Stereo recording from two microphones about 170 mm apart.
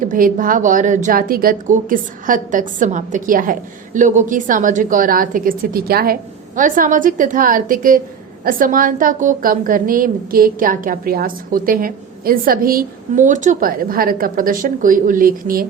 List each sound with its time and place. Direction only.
0.0 s a woman's voice: 50° right (ahead or behind)
6.6 s a woman's voice: 50° right (ahead or behind)